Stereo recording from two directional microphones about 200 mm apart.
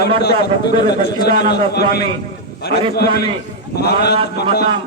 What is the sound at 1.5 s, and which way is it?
A man's voice, 55° left (ahead or behind).